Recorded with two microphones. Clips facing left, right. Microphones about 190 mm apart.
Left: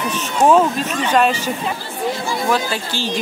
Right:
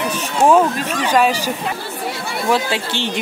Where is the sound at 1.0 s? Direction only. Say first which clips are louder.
Right 1 dB; 10° right (ahead or behind).